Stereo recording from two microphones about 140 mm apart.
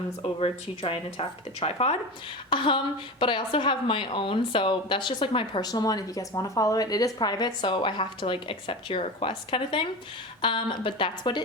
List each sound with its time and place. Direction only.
0.2 s speech: 40° left (ahead or behind)
2.5 s a woman's voice: 35° left (ahead or behind)